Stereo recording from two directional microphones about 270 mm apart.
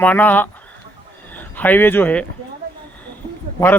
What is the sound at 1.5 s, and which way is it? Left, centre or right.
Speech, centre.